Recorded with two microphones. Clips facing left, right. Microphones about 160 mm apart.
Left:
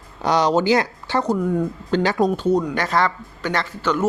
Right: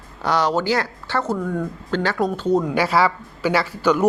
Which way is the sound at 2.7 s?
10° right (ahead or behind).